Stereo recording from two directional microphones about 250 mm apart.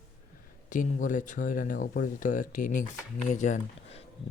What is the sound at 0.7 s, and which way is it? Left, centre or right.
Speech, left.